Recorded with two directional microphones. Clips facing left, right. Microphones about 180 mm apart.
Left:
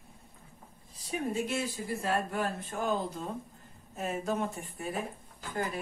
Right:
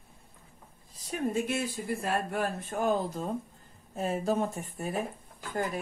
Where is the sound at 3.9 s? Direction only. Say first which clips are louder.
Right 4 dB; 30° right (ahead or behind).